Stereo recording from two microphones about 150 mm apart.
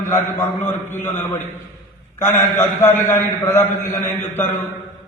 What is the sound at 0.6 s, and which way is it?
A man's voice, 15° left (ahead or behind).